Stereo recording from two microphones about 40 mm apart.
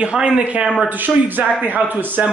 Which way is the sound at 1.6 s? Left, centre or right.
Right.